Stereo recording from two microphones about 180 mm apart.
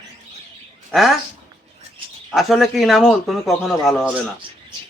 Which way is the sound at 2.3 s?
Centre (ahead or behind).